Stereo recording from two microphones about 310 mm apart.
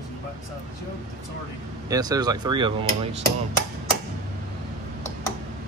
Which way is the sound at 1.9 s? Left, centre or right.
Centre.